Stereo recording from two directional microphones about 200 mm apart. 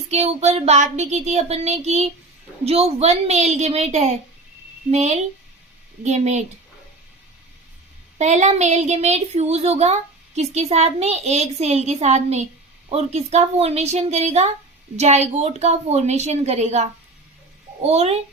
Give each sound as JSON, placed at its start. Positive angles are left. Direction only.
{"t": 0.1, "sound": "a woman's voice", "side_deg": -30}
{"t": 8.2, "sound": "a woman's voice", "side_deg": -35}